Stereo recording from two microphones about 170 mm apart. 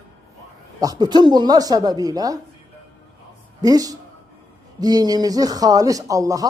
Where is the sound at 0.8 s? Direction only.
20° right (ahead or behind).